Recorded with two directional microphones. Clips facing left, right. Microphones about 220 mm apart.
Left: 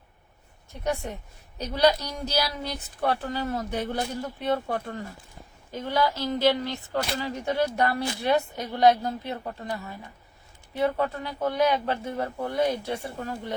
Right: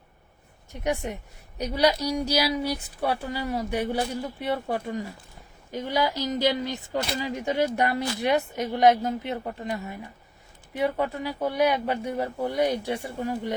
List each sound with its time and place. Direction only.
0.7 s a woman's voice: 15° right (ahead or behind)